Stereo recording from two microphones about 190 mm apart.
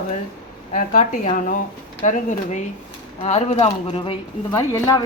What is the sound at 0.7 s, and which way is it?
A woman's voice, 45° left (ahead or behind).